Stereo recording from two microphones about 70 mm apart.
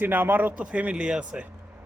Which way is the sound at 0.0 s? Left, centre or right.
Right.